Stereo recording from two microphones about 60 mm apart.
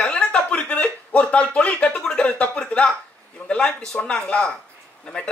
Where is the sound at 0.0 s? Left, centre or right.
Centre.